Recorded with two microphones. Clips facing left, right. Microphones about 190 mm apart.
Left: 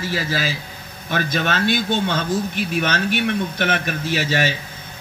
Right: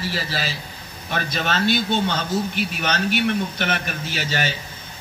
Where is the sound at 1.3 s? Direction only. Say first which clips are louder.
Even; 55° left (ahead or behind).